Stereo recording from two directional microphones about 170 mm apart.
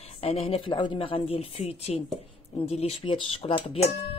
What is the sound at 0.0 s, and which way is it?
Speech, 35° left (ahead or behind).